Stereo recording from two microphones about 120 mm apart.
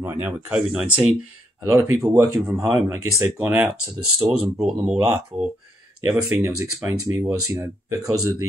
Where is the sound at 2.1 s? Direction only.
25° right (ahead or behind).